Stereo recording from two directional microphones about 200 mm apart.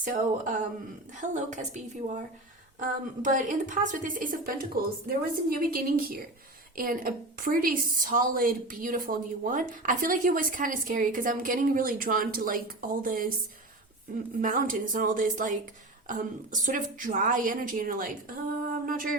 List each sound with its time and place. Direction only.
0.0 s a woman's voice: 40° right (ahead or behind)
2.8 s a woman's voice: 40° right (ahead or behind)